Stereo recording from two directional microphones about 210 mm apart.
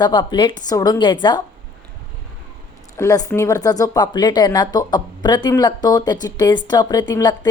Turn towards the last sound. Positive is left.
turn(degrees=20)  # may be behind; listen again after turning